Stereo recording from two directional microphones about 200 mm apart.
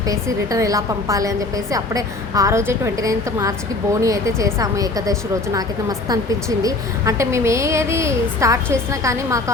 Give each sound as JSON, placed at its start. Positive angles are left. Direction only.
{"t": 0.0, "sound": "a woman's voice", "side_deg": -15}